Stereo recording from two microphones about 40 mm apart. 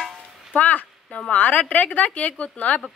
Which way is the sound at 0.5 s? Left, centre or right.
Left.